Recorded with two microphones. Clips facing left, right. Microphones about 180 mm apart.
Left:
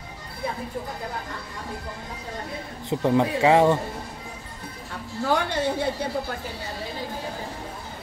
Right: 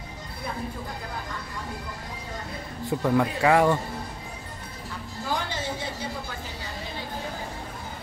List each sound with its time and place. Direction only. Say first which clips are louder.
2.8 s speech: left 2 dB; 20° left (ahead or behind)
5.3 s a woman's voice: left 6 dB; 60° left (ahead or behind)